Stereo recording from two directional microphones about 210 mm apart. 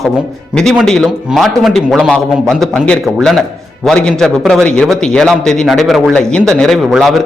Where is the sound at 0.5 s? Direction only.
Centre (ahead or behind).